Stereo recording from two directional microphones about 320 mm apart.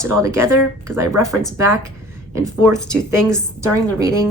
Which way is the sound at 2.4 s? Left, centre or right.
Centre.